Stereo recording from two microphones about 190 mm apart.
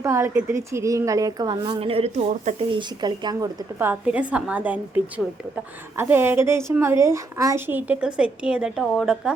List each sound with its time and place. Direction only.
0.0 s a woman's voice: 15° right (ahead or behind); by 2.6 s 40° right (ahead or behind)
2.6 s a woman's voice: 25° right (ahead or behind)
3.8 s a woman's voice: 10° right (ahead or behind)